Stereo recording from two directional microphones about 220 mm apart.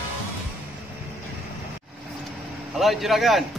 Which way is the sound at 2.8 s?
Centre (ahead or behind).